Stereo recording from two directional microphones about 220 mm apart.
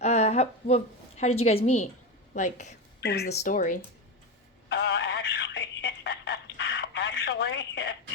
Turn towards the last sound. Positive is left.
turn(degrees=55)  # may be behind; listen again after turning